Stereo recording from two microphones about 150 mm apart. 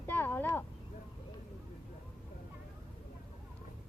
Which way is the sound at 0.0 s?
15° left (ahead or behind).